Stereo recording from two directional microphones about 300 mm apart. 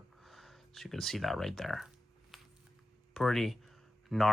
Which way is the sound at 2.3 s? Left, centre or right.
Centre.